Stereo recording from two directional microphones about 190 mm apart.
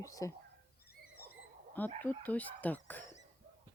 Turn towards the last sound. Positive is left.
turn(degrees=10)  # may be behind; listen again after turning